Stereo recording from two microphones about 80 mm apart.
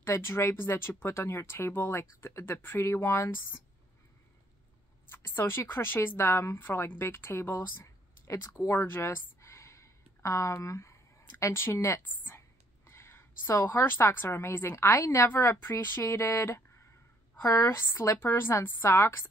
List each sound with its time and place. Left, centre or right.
0.0 s speech: left
5.1 s speech: left
8.6 s a sound: left
12.0 s a woman's voice: left
17.9 s speech: left